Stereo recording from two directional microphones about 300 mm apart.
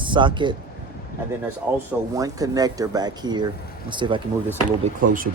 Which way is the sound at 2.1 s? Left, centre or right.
Centre.